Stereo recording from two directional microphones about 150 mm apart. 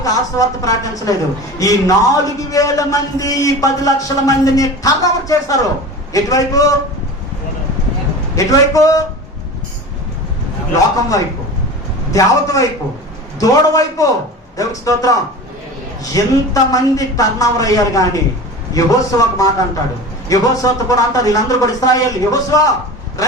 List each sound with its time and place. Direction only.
0.0 s a man's voice: 25° left (ahead or behind)
8.4 s a man's voice: 20° left (ahead or behind)
12.1 s a man's voice: 20° left (ahead or behind)